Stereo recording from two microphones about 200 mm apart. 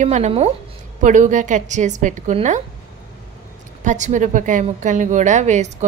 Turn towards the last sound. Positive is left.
turn(degrees=-35)  # may be behind; listen again after turning